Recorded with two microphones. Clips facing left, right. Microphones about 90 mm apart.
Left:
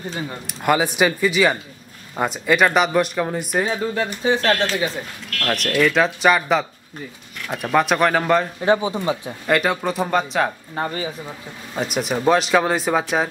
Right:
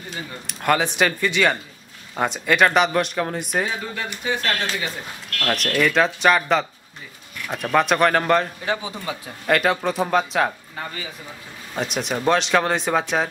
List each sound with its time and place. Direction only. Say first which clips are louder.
0.5 s speech: left 1 dB; 5° left (ahead or behind)
3.6 s speech: left 6 dB; 30° left (ahead or behind)
5.4 s speech: left 2 dB; centre (ahead or behind)
8.6 s speech: left 8 dB; 25° left (ahead or behind)
9.5 s speech: even; centre (ahead or behind)
10.8 s speech: left 8 dB; 35° left (ahead or behind)
11.7 s speech: left 2 dB; 5° left (ahead or behind)